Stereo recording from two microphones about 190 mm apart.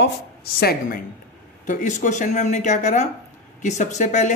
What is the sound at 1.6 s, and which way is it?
Speech, 40° left (ahead or behind).